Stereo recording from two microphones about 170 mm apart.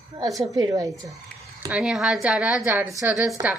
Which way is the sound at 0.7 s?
20° right (ahead or behind).